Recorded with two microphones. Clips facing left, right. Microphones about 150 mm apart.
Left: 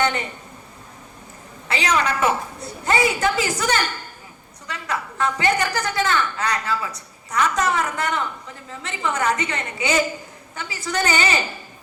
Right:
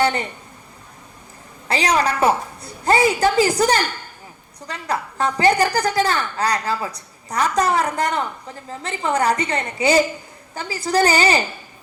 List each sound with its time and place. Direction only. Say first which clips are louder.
0.0 s a woman's voice: right 3 dB; 35° right (ahead or behind)
1.6 s a woman's voice: right 3 dB; 35° right (ahead or behind)